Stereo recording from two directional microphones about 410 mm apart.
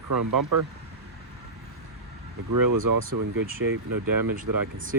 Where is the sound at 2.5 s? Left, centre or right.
Right.